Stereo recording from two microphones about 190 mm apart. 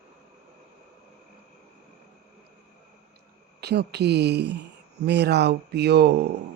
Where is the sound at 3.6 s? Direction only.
60° right (ahead or behind).